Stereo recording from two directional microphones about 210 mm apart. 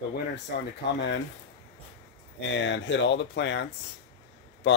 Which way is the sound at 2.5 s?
60° left (ahead or behind).